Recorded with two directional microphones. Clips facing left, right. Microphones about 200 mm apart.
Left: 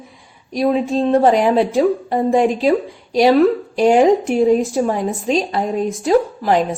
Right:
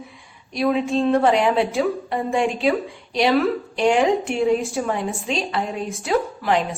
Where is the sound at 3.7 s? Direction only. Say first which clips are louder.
Left 5 dB; 40° left (ahead or behind).